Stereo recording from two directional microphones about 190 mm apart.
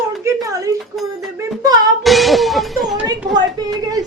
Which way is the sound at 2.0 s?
Centre (ahead or behind).